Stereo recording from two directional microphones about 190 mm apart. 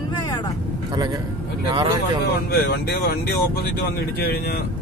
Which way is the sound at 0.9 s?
20° right (ahead or behind).